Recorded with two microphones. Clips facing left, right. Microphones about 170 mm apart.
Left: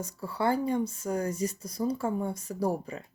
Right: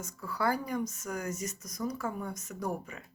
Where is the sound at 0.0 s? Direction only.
30° left (ahead or behind).